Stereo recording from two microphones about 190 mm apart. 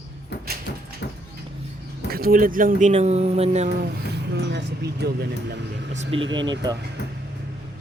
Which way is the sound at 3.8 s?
65° right (ahead or behind).